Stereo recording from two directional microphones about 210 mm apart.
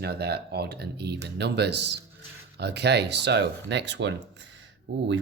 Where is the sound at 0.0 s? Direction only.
50° right (ahead or behind).